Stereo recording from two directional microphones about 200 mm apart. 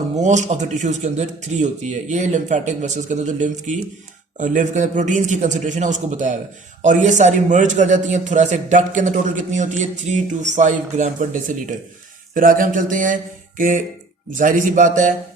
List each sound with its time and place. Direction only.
0.2 s a man's voice: 35° right (ahead or behind)